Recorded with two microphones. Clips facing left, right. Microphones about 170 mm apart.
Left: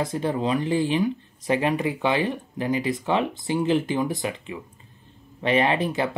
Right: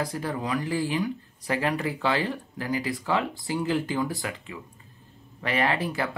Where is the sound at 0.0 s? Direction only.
25° left (ahead or behind).